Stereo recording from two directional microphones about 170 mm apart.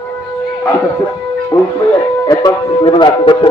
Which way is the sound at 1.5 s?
20° left (ahead or behind).